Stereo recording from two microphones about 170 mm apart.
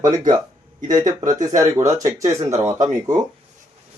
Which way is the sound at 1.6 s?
20° right (ahead or behind).